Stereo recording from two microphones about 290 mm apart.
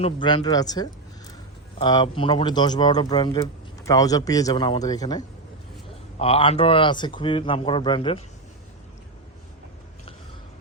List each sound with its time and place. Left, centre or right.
0.0 s speech: centre